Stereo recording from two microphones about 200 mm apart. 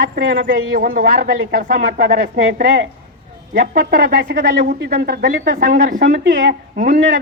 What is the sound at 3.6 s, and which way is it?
Speech, 45° right (ahead or behind).